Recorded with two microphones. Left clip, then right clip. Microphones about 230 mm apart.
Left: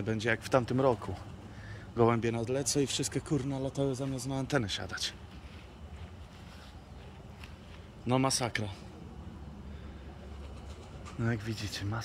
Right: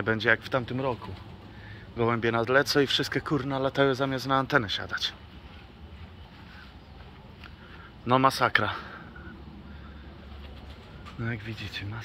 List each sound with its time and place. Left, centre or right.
0.0 s speech: centre; by 0.9 s left
2.0 s speech: centre
8.1 s speech: centre
11.1 s speech: left